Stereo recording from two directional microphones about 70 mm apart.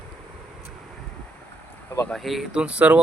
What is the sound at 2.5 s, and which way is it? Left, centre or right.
Speech, centre.